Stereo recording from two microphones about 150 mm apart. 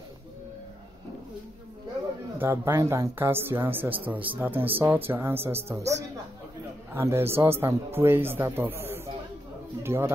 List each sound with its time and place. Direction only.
2.3 s speech: 15° right (ahead or behind)